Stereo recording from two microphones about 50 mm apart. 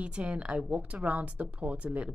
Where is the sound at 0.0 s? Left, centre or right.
Right.